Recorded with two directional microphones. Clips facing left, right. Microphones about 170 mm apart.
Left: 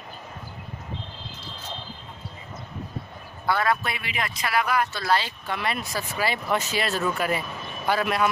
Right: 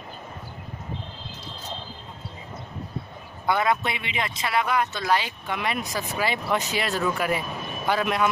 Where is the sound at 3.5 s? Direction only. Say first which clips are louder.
Right 1 dB; 20° right (ahead or behind).